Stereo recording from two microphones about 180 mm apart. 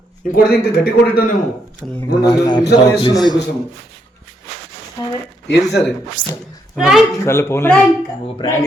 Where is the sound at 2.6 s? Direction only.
65° left (ahead or behind).